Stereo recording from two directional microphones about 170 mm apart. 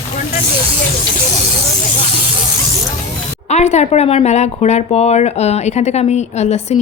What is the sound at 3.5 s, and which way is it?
Speech, 40° left (ahead or behind).